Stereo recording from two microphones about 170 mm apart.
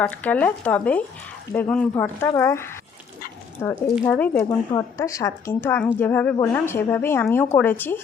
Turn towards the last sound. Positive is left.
turn(degrees=10)  # may be behind; listen again after turning